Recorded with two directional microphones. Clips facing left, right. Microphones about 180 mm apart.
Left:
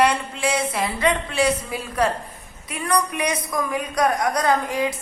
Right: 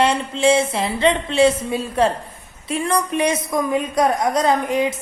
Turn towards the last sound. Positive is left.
turn(degrees=-20)  # may be behind; listen again after turning